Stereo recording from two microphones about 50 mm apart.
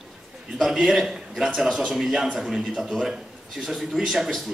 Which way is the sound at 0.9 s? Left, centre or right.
Centre.